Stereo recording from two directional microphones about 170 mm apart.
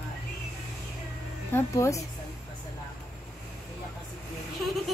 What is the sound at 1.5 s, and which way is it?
Speech, 15° left (ahead or behind).